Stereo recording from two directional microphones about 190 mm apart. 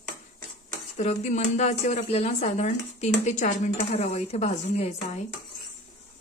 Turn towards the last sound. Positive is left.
turn(degrees=35)  # may be behind; listen again after turning